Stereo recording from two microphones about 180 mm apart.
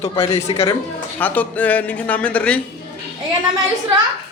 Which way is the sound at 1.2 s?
10° left (ahead or behind).